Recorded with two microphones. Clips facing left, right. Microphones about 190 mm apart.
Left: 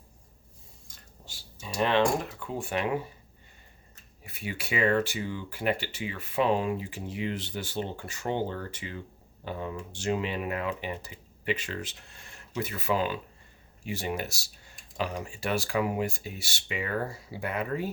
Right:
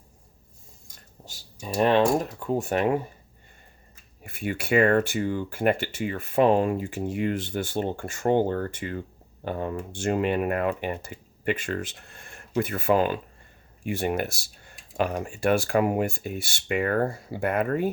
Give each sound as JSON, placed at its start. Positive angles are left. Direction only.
{"t": 1.6, "sound": "speech", "side_deg": -45}
{"t": 4.2, "sound": "speech", "side_deg": -55}